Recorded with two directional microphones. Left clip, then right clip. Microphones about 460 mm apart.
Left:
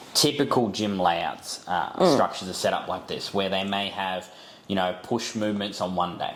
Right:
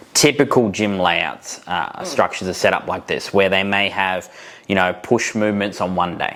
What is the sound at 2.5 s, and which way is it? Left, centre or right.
Speech, right.